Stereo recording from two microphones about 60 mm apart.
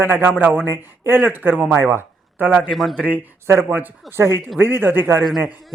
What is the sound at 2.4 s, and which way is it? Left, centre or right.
Speech, right.